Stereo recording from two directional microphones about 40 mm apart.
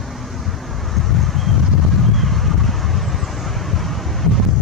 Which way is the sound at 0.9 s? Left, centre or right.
Centre.